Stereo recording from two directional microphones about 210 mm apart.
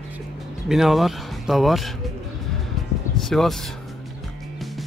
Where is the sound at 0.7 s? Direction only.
Centre (ahead or behind).